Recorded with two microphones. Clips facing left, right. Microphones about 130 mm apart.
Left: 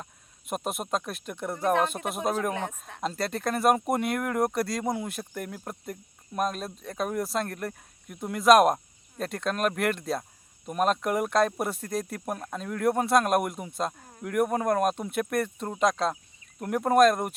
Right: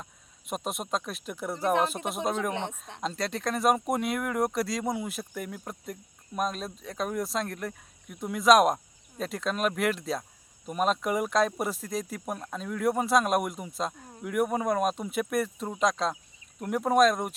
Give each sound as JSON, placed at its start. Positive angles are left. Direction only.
{"t": 0.0, "sound": "speech", "side_deg": 0}
{"t": 2.5, "sound": "speech", "side_deg": -25}
{"t": 3.0, "sound": "speech", "side_deg": 0}